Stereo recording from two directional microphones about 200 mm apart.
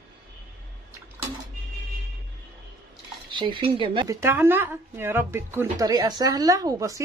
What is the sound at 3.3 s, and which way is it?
Speech, 25° right (ahead or behind).